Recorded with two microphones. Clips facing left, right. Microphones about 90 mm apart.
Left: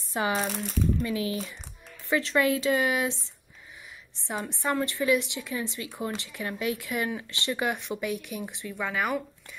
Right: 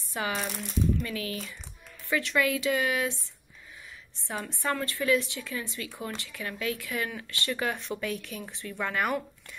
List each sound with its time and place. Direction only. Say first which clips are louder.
0.1 s a woman's voice: left 4 dB; 30° left (ahead or behind)
8.7 s speech: even; centre (ahead or behind)